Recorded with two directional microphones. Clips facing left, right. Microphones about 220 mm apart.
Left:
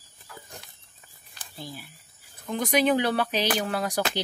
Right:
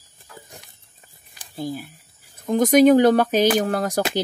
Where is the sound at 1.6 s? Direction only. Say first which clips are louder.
Right 12 dB; 45° right (ahead or behind).